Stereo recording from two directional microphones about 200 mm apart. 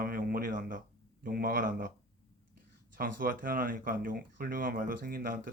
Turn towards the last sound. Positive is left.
turn(degrees=-45)  # may be behind; listen again after turning